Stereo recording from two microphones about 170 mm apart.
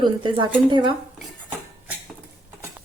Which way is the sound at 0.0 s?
25° right (ahead or behind).